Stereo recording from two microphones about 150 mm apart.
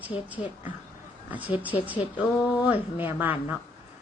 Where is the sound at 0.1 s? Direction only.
30° left (ahead or behind).